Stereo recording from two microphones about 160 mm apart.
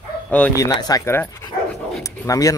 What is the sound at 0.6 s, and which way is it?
Speech, 25° left (ahead or behind).